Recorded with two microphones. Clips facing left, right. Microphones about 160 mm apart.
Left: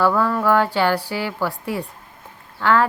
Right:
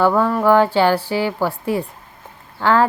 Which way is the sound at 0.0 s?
25° right (ahead or behind).